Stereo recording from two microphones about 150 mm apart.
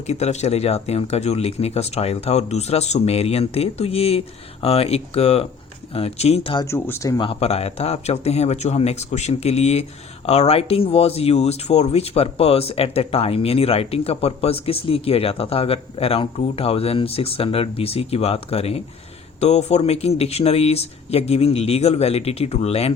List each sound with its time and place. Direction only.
0.1 s speech: 45° left (ahead or behind)
6.7 s speech: 15° left (ahead or behind)
7.2 s speech: 40° left (ahead or behind)